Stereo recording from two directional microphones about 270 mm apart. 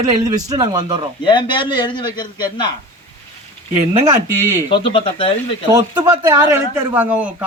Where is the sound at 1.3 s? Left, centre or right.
Centre.